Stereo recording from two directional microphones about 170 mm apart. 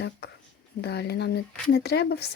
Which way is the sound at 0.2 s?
80° left.